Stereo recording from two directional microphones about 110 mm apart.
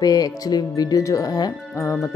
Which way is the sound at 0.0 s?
35° left (ahead or behind).